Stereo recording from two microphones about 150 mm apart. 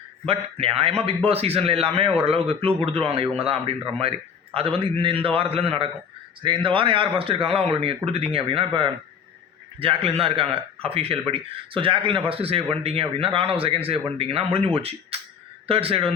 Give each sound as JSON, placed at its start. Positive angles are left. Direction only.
{"t": 0.3, "sound": "speech", "side_deg": -40}